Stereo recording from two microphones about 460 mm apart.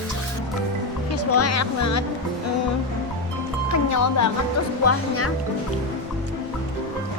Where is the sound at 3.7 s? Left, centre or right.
Left.